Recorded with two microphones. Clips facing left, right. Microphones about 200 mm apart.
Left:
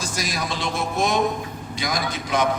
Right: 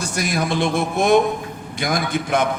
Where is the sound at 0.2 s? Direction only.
55° right (ahead or behind).